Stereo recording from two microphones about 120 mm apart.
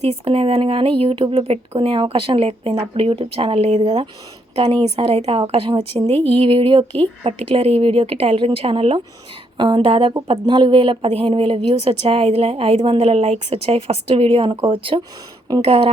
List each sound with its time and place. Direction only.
0.0 s a woman's voice: 55° right (ahead or behind)
9.6 s a woman's voice: 40° right (ahead or behind)